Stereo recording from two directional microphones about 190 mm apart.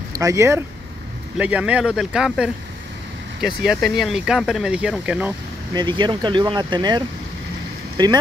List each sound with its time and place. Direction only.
0.1 s speech: 15° right (ahead or behind)
3.6 s speech: centre (ahead or behind)
5.7 s speech: 25° right (ahead or behind)